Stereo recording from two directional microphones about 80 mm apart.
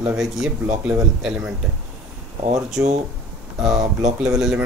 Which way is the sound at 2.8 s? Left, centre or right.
Right.